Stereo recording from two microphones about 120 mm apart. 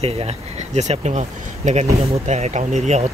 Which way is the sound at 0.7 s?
70° right (ahead or behind).